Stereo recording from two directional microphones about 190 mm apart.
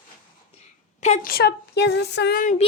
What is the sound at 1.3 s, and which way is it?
Speech, 55° left (ahead or behind).